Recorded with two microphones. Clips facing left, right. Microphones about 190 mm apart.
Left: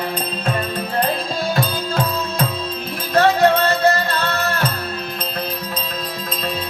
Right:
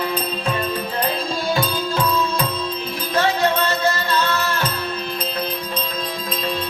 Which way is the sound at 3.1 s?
60° left (ahead or behind).